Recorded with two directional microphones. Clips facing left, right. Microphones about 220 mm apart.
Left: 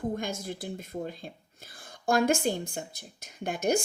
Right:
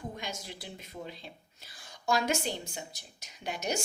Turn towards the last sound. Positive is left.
turn(degrees=50)  # may be behind; listen again after turning